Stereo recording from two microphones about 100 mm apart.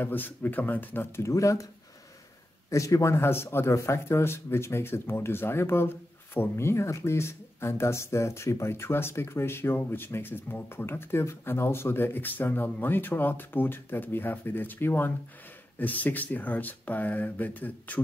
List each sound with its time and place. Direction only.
0.0 s speech: 20° left (ahead or behind)
2.7 s speech: 30° left (ahead or behind); by 18.0 s 15° left (ahead or behind)